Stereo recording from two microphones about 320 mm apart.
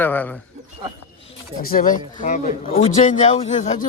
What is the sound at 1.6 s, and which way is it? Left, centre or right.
A man's voice, left.